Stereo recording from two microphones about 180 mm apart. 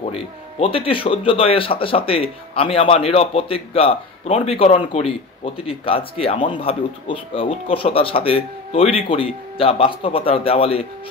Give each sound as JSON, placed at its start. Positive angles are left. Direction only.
{"t": 0.0, "sound": "speech", "side_deg": 30}